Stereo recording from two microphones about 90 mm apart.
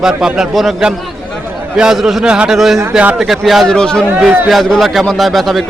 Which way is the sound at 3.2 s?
5° right (ahead or behind).